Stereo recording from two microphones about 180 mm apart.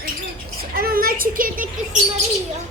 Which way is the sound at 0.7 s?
55° right (ahead or behind).